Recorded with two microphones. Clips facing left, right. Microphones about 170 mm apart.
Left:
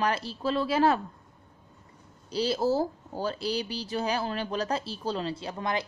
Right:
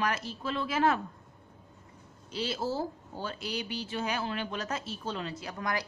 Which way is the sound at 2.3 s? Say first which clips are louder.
Left 7 dB; 35° left (ahead or behind).